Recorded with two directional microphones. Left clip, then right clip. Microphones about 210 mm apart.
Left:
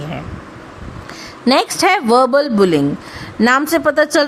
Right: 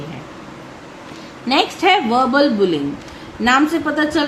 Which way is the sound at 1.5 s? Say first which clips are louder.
Left 1 dB; 55° left (ahead or behind).